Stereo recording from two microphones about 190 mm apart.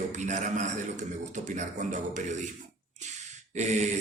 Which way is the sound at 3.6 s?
35° right (ahead or behind).